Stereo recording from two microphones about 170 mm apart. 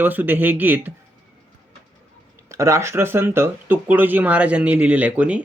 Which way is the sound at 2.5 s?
15° right (ahead or behind).